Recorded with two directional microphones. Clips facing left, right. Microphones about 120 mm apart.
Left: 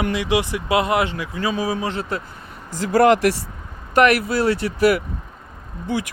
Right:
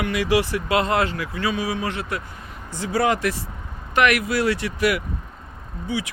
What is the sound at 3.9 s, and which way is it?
Speech, 35° left (ahead or behind).